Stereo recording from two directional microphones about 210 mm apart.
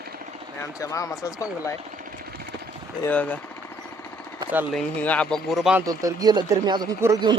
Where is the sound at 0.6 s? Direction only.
15° left (ahead or behind).